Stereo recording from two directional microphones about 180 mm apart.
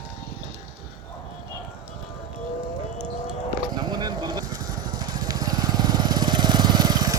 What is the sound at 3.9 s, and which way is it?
Vehicle, 25° right (ahead or behind).